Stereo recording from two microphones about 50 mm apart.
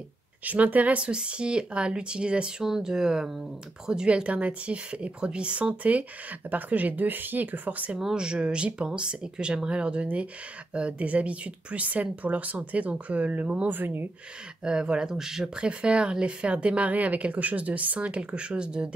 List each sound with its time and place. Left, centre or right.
0.5 s speech: right
8.0 s speech: centre; by 13.7 s right
13.7 s speech: right
14.6 s speech: centre